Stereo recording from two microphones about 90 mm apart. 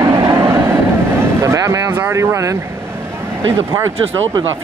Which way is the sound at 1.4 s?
35° right (ahead or behind).